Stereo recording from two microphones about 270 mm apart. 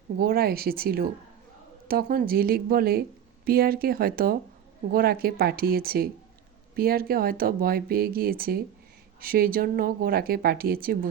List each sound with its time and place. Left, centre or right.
0.2 s speech: right